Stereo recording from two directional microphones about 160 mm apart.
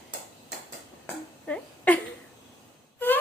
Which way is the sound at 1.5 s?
10° left (ahead or behind).